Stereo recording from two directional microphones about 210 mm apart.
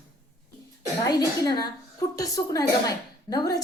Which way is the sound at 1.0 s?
20° left (ahead or behind).